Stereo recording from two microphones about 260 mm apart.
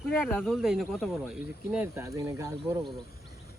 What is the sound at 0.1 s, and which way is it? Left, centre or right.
Speech, centre.